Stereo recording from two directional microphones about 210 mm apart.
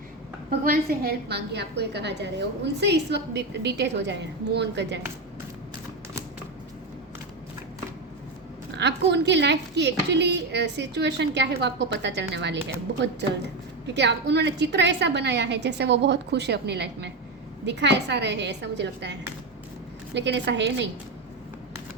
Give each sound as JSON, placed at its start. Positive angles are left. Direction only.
{"t": 0.6, "sound": "a woman's voice", "side_deg": -45}
{"t": 8.8, "sound": "a woman's voice", "side_deg": -55}
{"t": 13.8, "sound": "a woman's voice", "side_deg": -55}
{"t": 20.1, "sound": "a woman's voice", "side_deg": -55}